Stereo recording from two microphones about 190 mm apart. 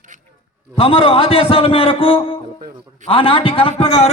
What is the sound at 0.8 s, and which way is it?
A man's voice, 30° left (ahead or behind).